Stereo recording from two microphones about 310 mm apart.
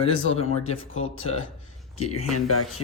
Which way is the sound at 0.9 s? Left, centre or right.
Left.